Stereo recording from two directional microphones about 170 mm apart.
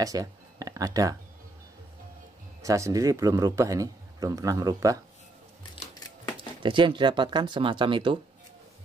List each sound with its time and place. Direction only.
0.0 s speech: 20° right (ahead or behind)
2.6 s speech: 20° right (ahead or behind)
5.6 s a sound: 25° left (ahead or behind)
6.3 s speech: 30° right (ahead or behind)